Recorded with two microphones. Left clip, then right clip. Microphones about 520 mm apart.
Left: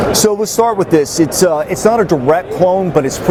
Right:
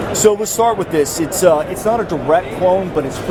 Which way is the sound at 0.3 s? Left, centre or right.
Left.